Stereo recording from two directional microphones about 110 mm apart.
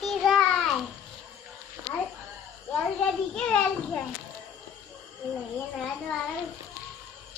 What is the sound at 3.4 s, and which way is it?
Children playing, 10° left (ahead or behind).